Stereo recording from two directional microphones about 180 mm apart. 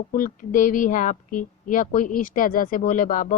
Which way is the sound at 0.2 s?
50° left (ahead or behind).